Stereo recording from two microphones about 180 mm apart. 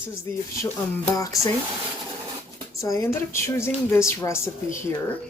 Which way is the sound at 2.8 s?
20° left (ahead or behind).